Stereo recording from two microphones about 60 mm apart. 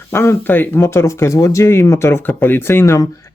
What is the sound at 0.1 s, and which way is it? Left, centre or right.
Speech, left.